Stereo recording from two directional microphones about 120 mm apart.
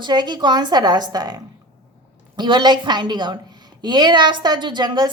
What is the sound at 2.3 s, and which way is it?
A woman's voice, 40° right (ahead or behind).